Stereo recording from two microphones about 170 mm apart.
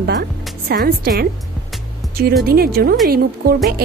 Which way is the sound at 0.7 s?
65° right (ahead or behind).